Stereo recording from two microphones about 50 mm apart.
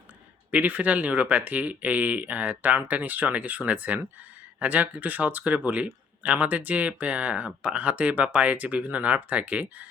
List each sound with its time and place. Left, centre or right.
0.5 s speech: right